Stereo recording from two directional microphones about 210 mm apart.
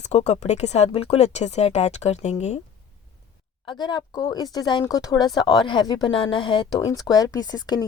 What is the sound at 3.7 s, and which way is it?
A woman's voice, 20° left (ahead or behind).